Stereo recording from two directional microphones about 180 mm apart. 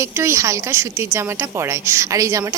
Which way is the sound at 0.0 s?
15° right (ahead or behind).